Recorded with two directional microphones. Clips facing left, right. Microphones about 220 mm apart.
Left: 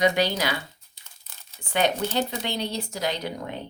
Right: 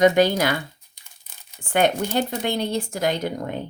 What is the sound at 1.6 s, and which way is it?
Speech, 50° right (ahead or behind).